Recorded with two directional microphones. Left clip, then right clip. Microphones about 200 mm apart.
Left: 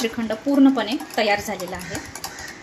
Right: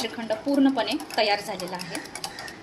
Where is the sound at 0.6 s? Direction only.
35° left (ahead or behind).